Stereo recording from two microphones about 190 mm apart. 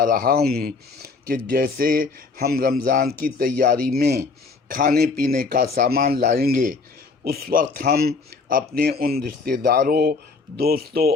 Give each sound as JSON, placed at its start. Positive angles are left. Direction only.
{"t": 0.0, "sound": "speech", "side_deg": -45}